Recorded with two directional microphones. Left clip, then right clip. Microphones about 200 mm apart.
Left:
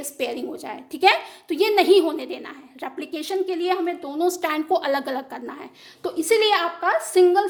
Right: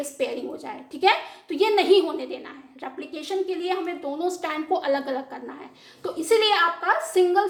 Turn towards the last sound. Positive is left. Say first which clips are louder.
# left 3 dB
turn(degrees=45)  # may be behind; listen again after turning